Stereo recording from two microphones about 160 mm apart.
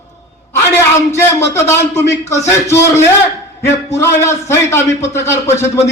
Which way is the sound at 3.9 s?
15° left (ahead or behind).